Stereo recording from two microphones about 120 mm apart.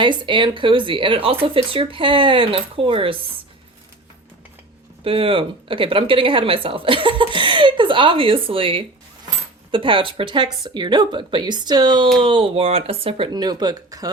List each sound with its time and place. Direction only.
0.0 s speech: 40° right (ahead or behind)
5.0 s speech: 50° right (ahead or behind); by 14.1 s 35° right (ahead or behind)